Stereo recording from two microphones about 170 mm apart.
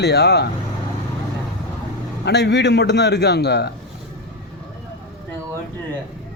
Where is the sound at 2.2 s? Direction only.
85° left.